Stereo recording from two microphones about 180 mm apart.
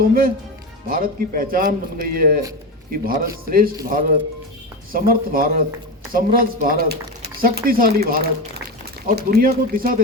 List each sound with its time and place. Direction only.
0.1 s speech: 55° right (ahead or behind)